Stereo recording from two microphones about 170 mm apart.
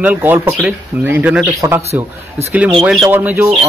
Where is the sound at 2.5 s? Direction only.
5° right (ahead or behind).